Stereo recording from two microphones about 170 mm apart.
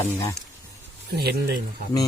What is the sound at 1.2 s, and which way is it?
Speech, 70° right (ahead or behind).